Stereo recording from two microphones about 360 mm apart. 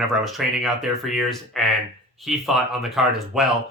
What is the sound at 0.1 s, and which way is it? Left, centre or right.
Speech, centre.